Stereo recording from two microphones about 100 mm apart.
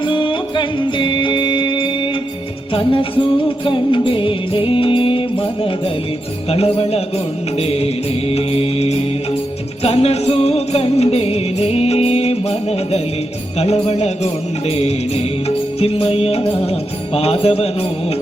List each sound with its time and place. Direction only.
0.0 s music: 55° left (ahead or behind)
6.5 s music: 75° left (ahead or behind)
7.6 s music: 90° left